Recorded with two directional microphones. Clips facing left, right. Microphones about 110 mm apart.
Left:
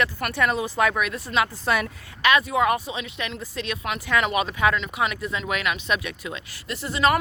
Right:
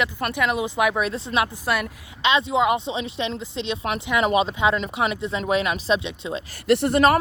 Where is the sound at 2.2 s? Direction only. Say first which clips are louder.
Even; 25° right (ahead or behind).